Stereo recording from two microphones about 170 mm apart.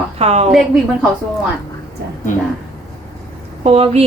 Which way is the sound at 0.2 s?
40° right (ahead or behind).